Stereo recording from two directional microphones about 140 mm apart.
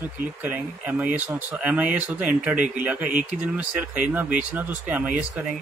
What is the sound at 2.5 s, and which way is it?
Speech, 65° right (ahead or behind).